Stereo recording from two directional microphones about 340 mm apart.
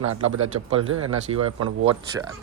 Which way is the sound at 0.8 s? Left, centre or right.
Right.